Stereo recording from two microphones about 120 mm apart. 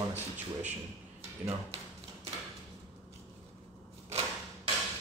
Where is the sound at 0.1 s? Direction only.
15° right (ahead or behind).